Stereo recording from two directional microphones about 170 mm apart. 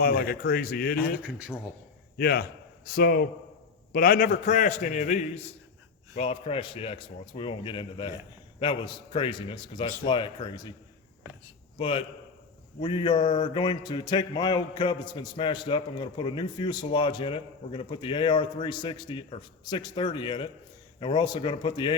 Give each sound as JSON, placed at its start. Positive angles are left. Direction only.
{"t": 0.0, "sound": "a man's voice", "side_deg": 60}
{"t": 2.1, "sound": "a man's voice", "side_deg": 65}
{"t": 3.9, "sound": "a man's voice", "side_deg": 55}
{"t": 8.5, "sound": "mantra", "side_deg": 30}
{"t": 11.8, "sound": "a man's voice", "side_deg": 30}
{"t": 12.8, "sound": "mantra", "side_deg": 30}